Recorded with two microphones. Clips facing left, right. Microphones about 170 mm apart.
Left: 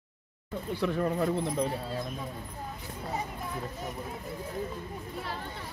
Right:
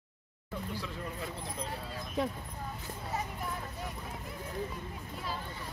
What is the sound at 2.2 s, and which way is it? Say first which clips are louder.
Speech: right 7 dB; 80° right.